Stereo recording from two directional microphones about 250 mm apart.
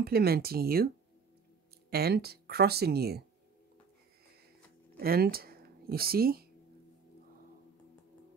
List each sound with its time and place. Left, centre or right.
0.0 s speech: right
1.9 s speech: right
4.9 s speech: right